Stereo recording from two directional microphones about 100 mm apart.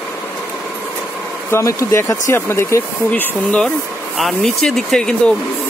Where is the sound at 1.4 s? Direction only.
30° left (ahead or behind).